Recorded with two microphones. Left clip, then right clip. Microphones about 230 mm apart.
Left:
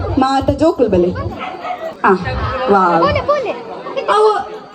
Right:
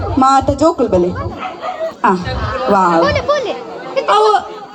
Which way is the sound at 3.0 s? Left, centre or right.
Centre.